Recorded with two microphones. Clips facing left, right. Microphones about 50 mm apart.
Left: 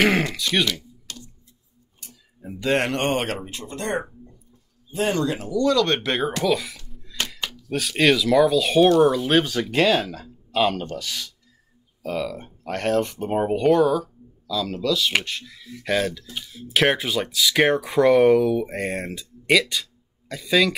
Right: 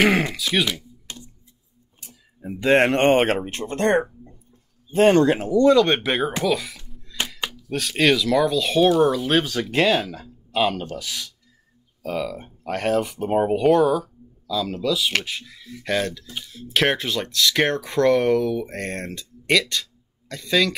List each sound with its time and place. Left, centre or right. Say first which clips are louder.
0.0 s speech: right 1 dB; centre
1.0 s tick: right 1 dB; right
2.0 s a sound: right 1 dB; centre
2.5 s speech: right 5 dB; right
6.0 s speech: even; centre
6.9 s music: even; centre
7.3 s a sound: right 1 dB; centre
7.7 s speech: even; centre